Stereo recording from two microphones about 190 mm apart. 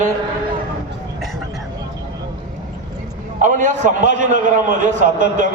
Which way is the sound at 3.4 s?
40° right (ahead or behind).